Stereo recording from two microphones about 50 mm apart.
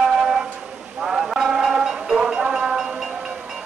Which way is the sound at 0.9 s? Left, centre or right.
Centre.